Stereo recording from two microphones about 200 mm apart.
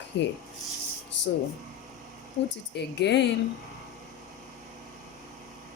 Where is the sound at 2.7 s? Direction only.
60° left (ahead or behind).